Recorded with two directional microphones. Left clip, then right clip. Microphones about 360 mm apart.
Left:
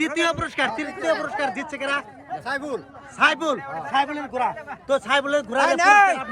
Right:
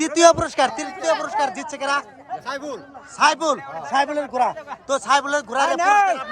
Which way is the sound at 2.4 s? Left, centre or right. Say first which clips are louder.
Left 3 dB; centre.